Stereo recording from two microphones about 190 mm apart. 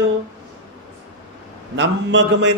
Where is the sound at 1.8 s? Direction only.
75° right (ahead or behind).